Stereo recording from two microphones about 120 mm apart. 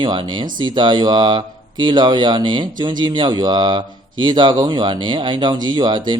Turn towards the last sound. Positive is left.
turn(degrees=-40)  # may be behind; listen again after turning